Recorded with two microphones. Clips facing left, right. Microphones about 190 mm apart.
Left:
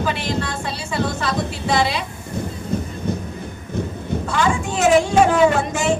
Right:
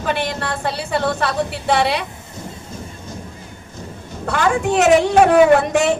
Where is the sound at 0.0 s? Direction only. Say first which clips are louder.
Right 1 dB; 60° right (ahead or behind).